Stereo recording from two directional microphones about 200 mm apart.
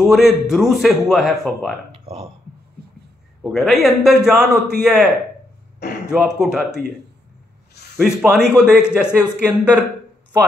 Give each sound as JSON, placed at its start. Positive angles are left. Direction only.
{"t": 0.0, "sound": "speech", "side_deg": 0}
{"t": 1.9, "sound": "a sound", "side_deg": -30}
{"t": 3.5, "sound": "speech", "side_deg": 0}
{"t": 6.1, "sound": "speech", "side_deg": 0}
{"t": 8.0, "sound": "speech", "side_deg": 0}